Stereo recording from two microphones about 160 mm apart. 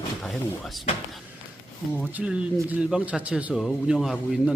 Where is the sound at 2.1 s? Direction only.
5° right (ahead or behind).